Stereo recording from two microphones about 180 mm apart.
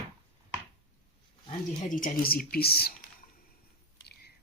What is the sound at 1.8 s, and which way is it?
Speech, 50° left (ahead or behind).